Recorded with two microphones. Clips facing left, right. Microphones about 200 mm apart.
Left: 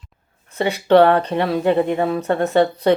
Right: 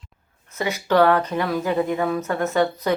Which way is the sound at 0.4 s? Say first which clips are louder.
Left 5 dB; 30° left (ahead or behind).